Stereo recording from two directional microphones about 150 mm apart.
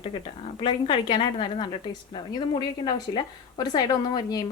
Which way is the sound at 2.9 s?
30° left (ahead or behind).